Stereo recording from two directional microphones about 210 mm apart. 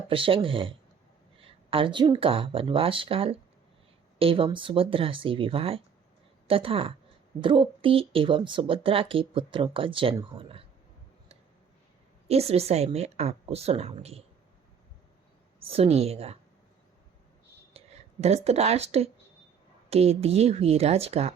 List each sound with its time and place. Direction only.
0.1 s speech: 25° right (ahead or behind)
12.3 s speech: 30° right (ahead or behind)
15.6 s speech: 30° right (ahead or behind)
17.7 s speech: 30° right (ahead or behind)